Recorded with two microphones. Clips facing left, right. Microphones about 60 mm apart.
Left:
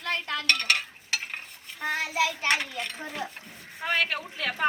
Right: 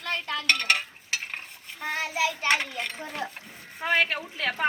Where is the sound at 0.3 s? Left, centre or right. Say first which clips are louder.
Right 2 dB; right.